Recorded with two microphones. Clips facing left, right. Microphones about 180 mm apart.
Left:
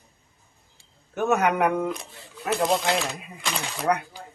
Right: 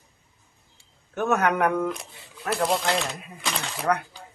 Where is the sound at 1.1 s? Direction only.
10° left (ahead or behind).